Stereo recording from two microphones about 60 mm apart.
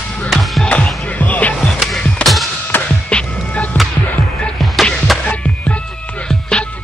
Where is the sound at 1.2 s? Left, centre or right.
Left.